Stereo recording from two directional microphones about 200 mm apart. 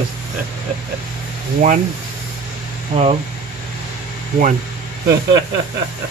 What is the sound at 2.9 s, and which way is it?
Speech, 30° right (ahead or behind).